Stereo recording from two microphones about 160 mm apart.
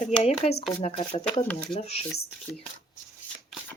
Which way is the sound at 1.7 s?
40° left (ahead or behind).